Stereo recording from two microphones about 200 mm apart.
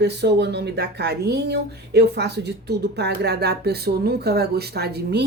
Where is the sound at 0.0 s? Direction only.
55° right (ahead or behind).